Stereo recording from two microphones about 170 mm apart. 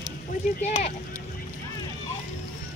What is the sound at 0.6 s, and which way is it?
Speech, 40° left (ahead or behind).